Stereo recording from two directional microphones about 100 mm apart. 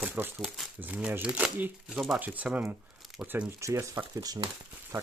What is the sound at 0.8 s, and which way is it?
Speech, 15° right (ahead or behind).